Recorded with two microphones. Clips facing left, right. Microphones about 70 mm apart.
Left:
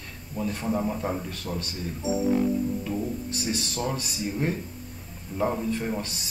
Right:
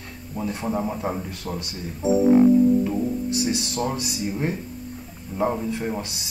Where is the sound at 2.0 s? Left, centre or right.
Right.